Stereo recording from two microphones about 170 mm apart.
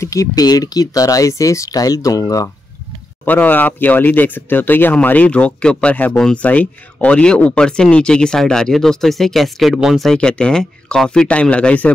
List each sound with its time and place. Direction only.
0.0 s speech: 20° left (ahead or behind)